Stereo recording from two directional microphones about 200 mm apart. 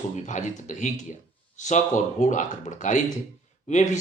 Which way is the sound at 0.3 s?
40° left (ahead or behind).